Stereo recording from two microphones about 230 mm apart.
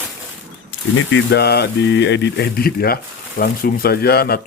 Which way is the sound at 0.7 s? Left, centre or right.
Left.